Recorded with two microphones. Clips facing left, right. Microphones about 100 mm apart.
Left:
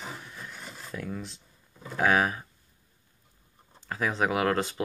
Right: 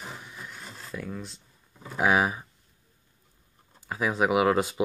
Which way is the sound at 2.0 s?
10° right (ahead or behind).